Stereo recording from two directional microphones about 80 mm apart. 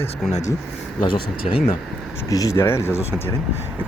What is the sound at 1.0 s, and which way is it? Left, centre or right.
Speech, left.